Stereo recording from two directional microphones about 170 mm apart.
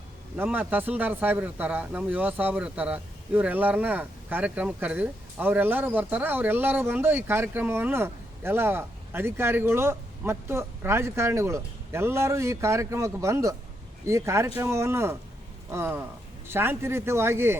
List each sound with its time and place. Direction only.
0.3 s speech: 10° right (ahead or behind)